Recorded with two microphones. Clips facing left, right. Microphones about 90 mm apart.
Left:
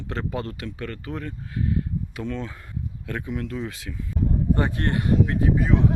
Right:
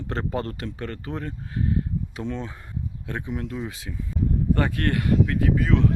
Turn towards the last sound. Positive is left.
turn(degrees=15)  # may be behind; listen again after turning